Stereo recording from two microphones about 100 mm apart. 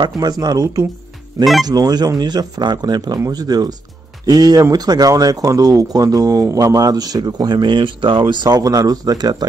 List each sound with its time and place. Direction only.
0.0 s speech: 40° right (ahead or behind)
1.4 s speech: centre (ahead or behind)
1.7 s speech: 40° right (ahead or behind)